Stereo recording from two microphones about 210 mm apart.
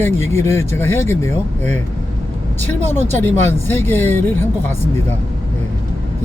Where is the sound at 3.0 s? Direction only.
35° right (ahead or behind).